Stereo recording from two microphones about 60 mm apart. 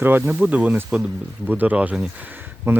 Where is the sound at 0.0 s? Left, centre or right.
Right.